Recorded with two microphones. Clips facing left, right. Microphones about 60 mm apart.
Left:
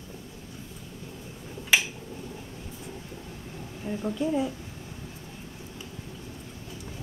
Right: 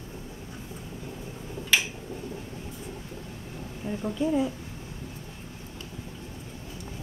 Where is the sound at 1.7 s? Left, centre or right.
Centre.